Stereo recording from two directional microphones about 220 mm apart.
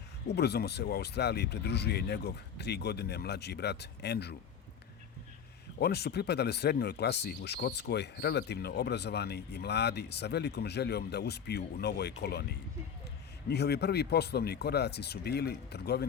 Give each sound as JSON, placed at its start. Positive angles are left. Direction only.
{"t": 0.3, "sound": "speech", "side_deg": 50}
{"t": 5.8, "sound": "speech", "side_deg": 50}
{"t": 13.5, "sound": "speech", "side_deg": 50}